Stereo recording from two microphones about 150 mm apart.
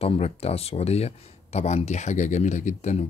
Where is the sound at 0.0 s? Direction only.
45° left (ahead or behind).